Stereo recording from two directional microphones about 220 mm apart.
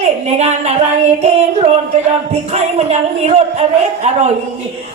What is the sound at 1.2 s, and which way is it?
A man's voice, 30° right (ahead or behind).